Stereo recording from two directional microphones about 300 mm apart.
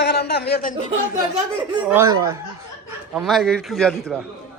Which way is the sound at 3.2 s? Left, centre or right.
Centre.